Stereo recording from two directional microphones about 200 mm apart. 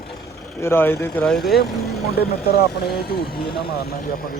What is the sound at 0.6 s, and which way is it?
A man's voice, 10° left (ahead or behind).